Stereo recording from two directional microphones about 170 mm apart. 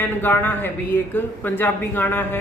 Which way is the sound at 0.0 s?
10° left (ahead or behind).